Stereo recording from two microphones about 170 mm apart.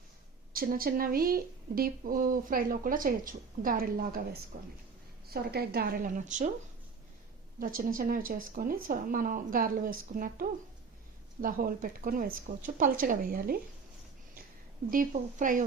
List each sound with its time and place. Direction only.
0.5 s speech: 55° right (ahead or behind)
7.6 s speech: 55° right (ahead or behind)
14.8 s speech: 50° right (ahead or behind)